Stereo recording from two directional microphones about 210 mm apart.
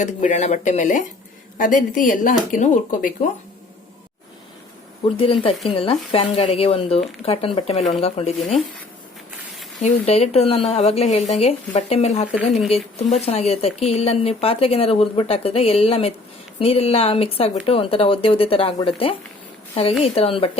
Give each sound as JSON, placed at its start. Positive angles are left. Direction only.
{"t": 0.0, "sound": "speech", "side_deg": 35}
{"t": 5.0, "sound": "speech", "side_deg": 25}
{"t": 9.8, "sound": "speech", "side_deg": 30}